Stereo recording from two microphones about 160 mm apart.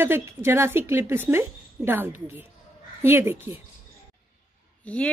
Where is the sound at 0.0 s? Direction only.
15° right (ahead or behind).